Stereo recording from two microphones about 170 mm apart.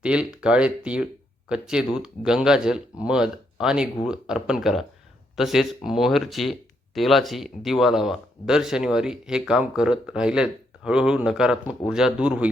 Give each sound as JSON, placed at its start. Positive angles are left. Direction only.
{"t": 0.0, "sound": "speech", "side_deg": -5}